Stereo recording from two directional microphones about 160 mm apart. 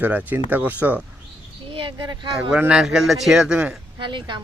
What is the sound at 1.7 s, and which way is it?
Speech, 30° right (ahead or behind).